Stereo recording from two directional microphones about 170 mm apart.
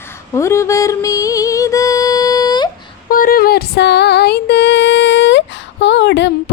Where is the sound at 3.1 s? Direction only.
55° left (ahead or behind); by 5.4 s 90° left.